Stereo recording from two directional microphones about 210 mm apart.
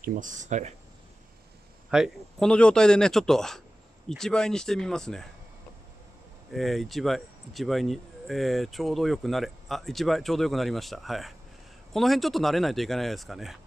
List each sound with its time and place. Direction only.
0.0 s speech: 40° right (ahead or behind)
1.9 s speech: centre (ahead or behind)
6.5 s speech: centre (ahead or behind)